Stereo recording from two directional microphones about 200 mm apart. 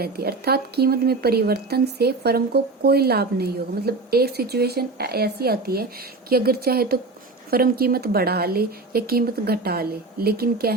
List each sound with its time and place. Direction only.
0.0 s speech: 50° right (ahead or behind)